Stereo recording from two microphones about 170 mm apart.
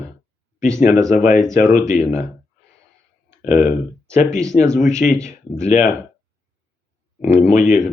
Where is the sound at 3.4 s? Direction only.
45° left (ahead or behind).